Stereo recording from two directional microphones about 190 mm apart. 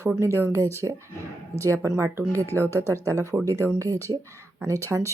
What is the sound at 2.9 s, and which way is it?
Speech, 15° right (ahead or behind).